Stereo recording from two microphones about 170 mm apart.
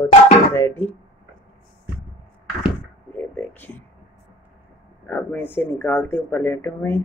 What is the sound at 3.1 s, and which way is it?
Speech, 10° left (ahead or behind).